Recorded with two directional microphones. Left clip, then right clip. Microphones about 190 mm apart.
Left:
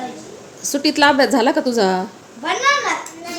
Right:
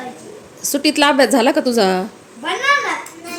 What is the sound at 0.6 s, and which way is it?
A woman's voice, 20° right (ahead or behind).